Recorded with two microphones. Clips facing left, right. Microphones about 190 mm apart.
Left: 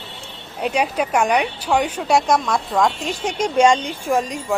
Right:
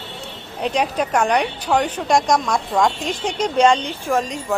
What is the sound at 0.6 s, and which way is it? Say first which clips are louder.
A woman's voice: even; 10° left (ahead or behind).